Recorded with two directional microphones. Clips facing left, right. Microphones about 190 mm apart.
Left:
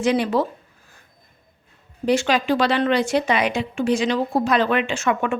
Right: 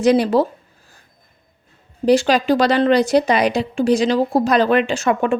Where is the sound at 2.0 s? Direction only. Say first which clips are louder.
Right 5 dB; 35° right (ahead or behind).